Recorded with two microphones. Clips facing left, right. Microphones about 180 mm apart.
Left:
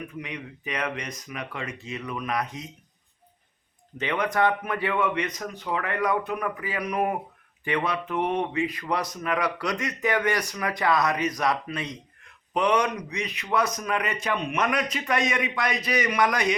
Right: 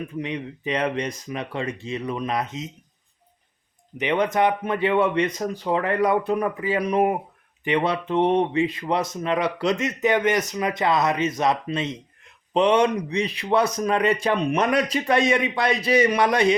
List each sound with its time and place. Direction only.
0.2 s speech: 30° right (ahead or behind)
3.9 s speech: 20° right (ahead or behind)